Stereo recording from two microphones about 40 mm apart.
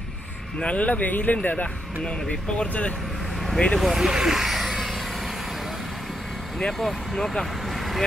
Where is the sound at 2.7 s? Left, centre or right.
Left.